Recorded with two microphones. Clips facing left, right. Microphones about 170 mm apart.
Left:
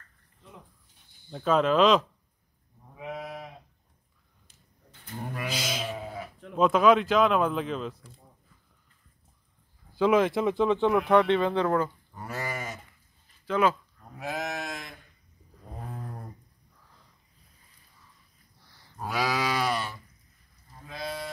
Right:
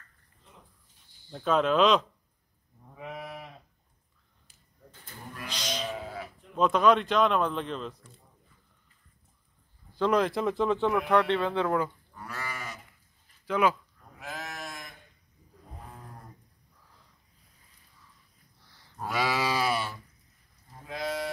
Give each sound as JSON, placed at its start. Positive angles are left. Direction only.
{"t": 1.3, "sound": "speech", "side_deg": 0}
{"t": 5.1, "sound": "livestock", "side_deg": 70}
{"t": 5.5, "sound": "sheep", "side_deg": 5}
{"t": 6.5, "sound": "speech", "side_deg": 5}
{"t": 9.9, "sound": "speech", "side_deg": 5}
{"t": 12.2, "sound": "goat", "side_deg": 40}
{"t": 13.5, "sound": "speech", "side_deg": -15}
{"t": 14.1, "sound": "sheep", "side_deg": 65}
{"t": 18.9, "sound": "livestock", "side_deg": 0}